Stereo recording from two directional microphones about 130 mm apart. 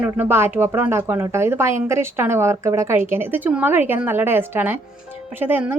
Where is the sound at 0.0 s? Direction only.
15° right (ahead or behind).